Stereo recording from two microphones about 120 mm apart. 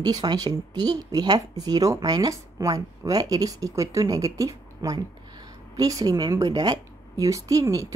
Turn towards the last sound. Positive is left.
turn(degrees=-25)  # may be behind; listen again after turning